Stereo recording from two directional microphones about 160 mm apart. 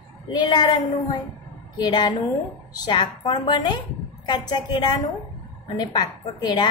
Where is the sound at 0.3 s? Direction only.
30° left (ahead or behind).